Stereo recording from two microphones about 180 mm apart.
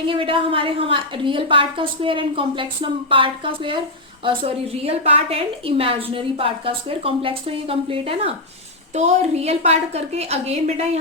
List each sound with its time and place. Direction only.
0.1 s a woman's voice: 30° right (ahead or behind)